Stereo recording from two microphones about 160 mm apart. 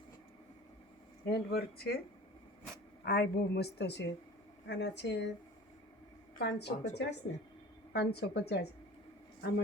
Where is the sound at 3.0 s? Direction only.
85° left.